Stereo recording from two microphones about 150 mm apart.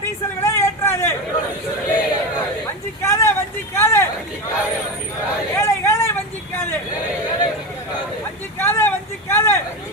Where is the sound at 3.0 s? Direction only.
20° left (ahead or behind).